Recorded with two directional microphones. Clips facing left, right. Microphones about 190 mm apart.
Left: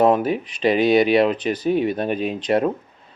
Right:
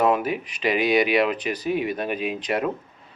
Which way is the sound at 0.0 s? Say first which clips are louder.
Left 4 dB; 30° left (ahead or behind).